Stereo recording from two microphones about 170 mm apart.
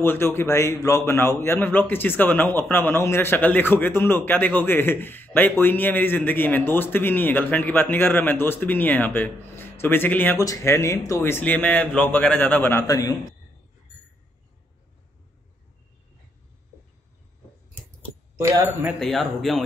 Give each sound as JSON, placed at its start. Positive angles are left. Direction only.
{"t": 0.0, "sound": "a man's voice", "side_deg": 15}
{"t": 18.4, "sound": "speech", "side_deg": -15}
{"t": 18.9, "sound": "speech", "side_deg": 0}